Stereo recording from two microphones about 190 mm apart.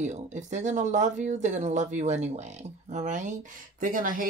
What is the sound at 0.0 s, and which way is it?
Speech, 40° right (ahead or behind).